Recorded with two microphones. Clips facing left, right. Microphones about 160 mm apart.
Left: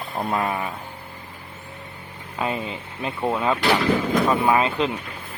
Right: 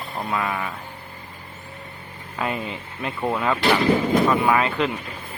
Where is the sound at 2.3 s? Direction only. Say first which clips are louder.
Left 1 dB; 20° left (ahead or behind).